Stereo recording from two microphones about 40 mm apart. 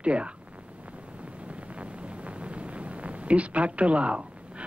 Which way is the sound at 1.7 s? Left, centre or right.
Right.